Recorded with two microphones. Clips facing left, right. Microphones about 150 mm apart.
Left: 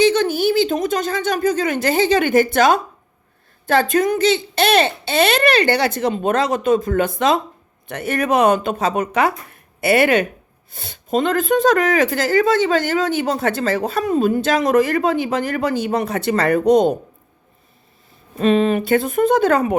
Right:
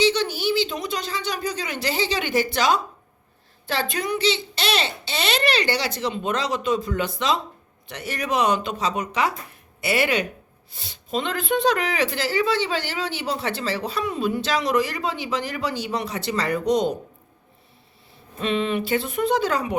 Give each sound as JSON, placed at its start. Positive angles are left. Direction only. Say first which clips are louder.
{"t": 0.0, "sound": "speech", "louder": "left 6 dB", "side_deg": 50}
{"t": 18.3, "sound": "speech", "louder": "left 8 dB", "side_deg": 45}